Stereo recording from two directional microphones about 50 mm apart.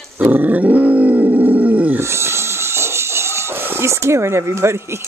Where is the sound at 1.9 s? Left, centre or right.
Right.